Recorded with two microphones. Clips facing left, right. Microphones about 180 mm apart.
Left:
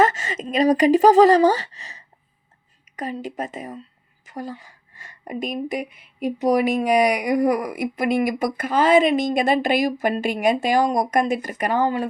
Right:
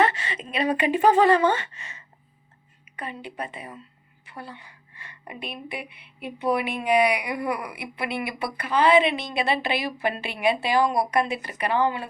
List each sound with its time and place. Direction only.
0.0 s a woman's voice: 45° left (ahead or behind)